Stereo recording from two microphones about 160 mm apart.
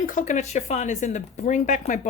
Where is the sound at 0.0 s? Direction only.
55° left (ahead or behind).